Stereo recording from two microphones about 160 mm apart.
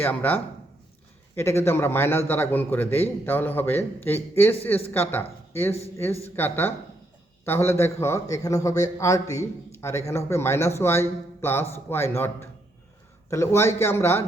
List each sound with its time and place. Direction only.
0.0 s a man's voice: 10° left (ahead or behind)